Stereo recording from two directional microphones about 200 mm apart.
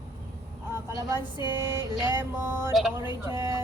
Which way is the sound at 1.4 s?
20° left (ahead or behind).